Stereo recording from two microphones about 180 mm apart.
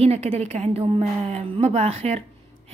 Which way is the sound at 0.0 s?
35° right (ahead or behind).